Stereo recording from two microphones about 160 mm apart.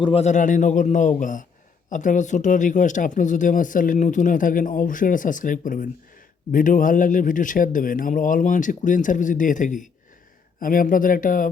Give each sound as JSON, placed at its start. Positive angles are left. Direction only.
{"t": 0.0, "sound": "a man's voice", "side_deg": 40}